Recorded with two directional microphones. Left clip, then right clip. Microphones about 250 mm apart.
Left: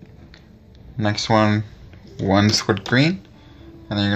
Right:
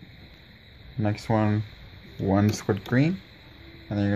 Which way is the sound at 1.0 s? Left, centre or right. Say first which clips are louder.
Left 8 dB; centre.